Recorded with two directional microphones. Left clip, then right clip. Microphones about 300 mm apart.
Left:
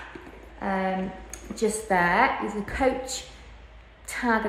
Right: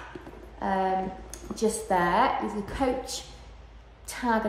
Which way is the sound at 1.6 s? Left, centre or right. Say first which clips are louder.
Left 2 dB; centre.